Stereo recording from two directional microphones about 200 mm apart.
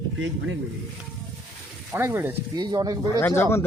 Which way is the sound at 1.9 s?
10° right (ahead or behind).